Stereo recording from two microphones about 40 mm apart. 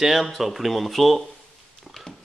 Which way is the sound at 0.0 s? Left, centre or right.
Centre.